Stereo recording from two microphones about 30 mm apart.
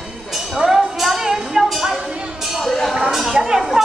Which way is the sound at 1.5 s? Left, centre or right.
Centre.